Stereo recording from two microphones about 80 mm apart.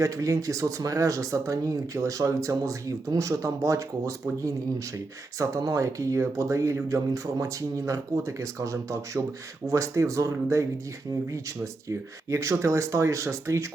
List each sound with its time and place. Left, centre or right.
0.0 s speech: right